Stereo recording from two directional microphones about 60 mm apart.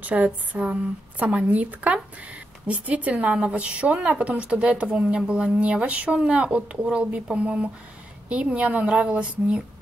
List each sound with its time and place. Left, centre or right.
0.0 s a woman's voice: right